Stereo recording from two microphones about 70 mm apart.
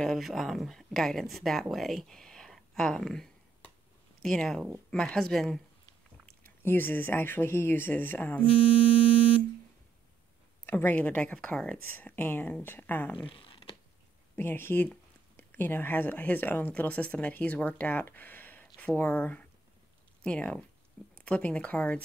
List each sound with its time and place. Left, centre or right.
0.0 s a woman's voice: centre
6.4 s speech: left
10.6 s speech: left; by 11.8 s centre
12.0 s speech: left
14.3 s speech: left
18.0 s a sound: left
18.9 s speech: left